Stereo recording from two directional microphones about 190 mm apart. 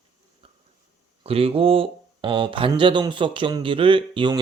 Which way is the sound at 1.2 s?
30° right (ahead or behind).